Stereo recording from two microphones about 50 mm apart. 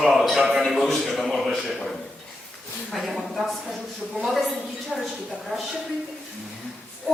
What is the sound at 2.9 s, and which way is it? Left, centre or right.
Speech, centre.